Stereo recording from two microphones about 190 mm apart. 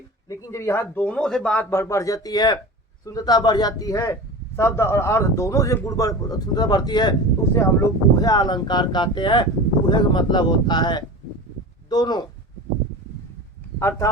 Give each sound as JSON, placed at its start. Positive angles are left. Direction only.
{"t": 0.3, "sound": "a man's voice", "side_deg": 15}
{"t": 13.7, "sound": "speech", "side_deg": 15}